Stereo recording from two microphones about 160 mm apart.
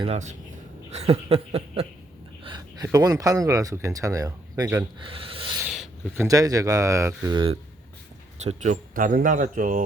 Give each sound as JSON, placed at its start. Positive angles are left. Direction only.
{"t": 0.0, "sound": "speech", "side_deg": -40}
{"t": 2.4, "sound": "speech", "side_deg": -25}
{"t": 5.0, "sound": "speech", "side_deg": -35}
{"t": 5.5, "sound": "a sound", "side_deg": -5}
{"t": 6.1, "sound": "speech", "side_deg": -20}
{"t": 7.3, "sound": "speech", "side_deg": -35}
{"t": 8.4, "sound": "speech", "side_deg": -45}